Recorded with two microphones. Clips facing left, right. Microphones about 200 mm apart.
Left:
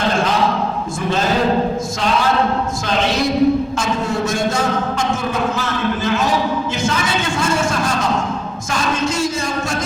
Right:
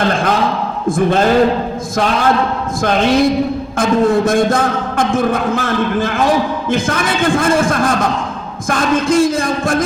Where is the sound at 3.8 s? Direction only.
55° right (ahead or behind).